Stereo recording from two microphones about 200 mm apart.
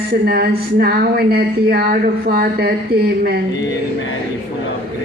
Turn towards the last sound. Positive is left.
turn(degrees=-50)  # may be behind; listen again after turning